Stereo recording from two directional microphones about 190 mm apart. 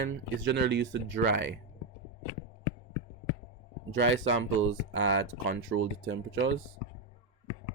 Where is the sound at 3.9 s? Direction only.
90° right.